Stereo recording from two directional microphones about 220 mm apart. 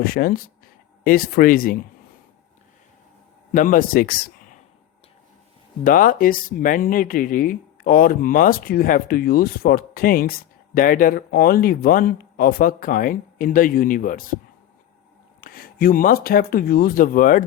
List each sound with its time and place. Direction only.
0.0 s speech: 40° left (ahead or behind)
3.5 s speech: 35° left (ahead or behind)
5.8 s speech: 40° left (ahead or behind)
15.4 s speech: 40° left (ahead or behind)